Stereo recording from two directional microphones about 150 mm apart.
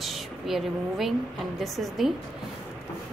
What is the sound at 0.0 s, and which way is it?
A woman's voice, centre (ahead or behind).